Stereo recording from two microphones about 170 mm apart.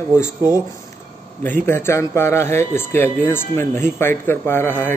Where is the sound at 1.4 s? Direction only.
10° left (ahead or behind).